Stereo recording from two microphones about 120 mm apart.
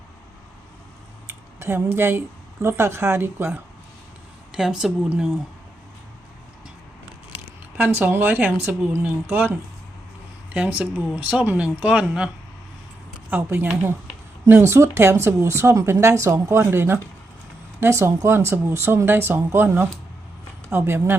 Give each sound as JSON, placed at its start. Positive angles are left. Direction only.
{"t": 1.3, "sound": "speech", "side_deg": -20}
{"t": 4.5, "sound": "speech", "side_deg": -5}
{"t": 7.8, "sound": "speech", "side_deg": -15}
{"t": 13.3, "sound": "speech", "side_deg": -15}